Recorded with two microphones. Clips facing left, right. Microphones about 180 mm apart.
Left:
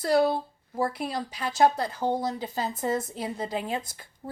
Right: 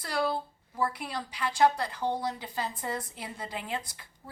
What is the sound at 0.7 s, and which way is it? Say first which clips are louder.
Speech: left 4 dB; 35° left (ahead or behind).